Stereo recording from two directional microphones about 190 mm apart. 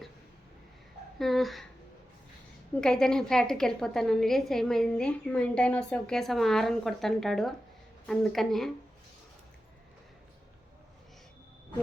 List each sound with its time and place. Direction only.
1.2 s a woman's voice: centre (ahead or behind)
2.8 s a woman's voice: 5° left (ahead or behind)